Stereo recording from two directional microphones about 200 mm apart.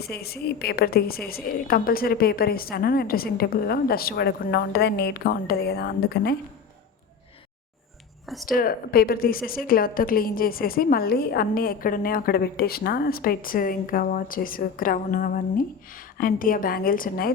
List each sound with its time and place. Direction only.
0.0 s a woman's voice: 50° left (ahead or behind)
8.4 s a woman's voice: 45° left (ahead or behind)